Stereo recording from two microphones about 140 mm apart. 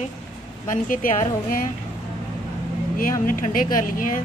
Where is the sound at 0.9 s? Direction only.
80° left.